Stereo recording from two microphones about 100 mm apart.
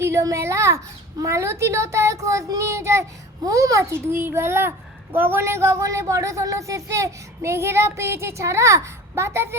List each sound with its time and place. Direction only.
0.0 s speech: 30° right (ahead or behind)